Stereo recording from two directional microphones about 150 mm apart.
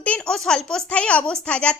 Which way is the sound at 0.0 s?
5° left (ahead or behind).